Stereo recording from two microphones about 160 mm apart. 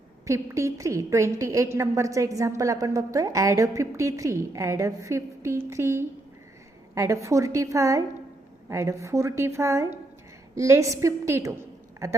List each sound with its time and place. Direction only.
0.3 s a woman's voice: 15° right (ahead or behind)